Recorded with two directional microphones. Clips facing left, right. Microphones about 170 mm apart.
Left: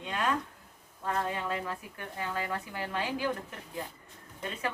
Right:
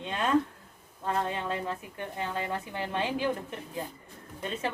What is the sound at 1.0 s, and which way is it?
A woman's voice, 25° right (ahead or behind).